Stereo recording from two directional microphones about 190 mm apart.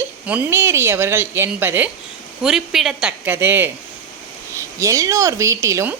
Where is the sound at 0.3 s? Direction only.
10° right (ahead or behind).